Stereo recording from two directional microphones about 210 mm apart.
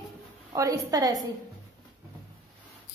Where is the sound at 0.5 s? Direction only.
15° right (ahead or behind).